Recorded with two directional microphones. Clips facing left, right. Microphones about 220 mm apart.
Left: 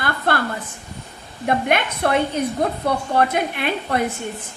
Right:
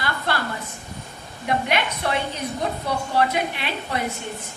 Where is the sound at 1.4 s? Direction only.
50° left (ahead or behind).